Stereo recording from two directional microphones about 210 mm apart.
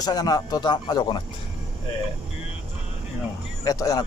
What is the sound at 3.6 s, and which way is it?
Speech, 15° left (ahead or behind).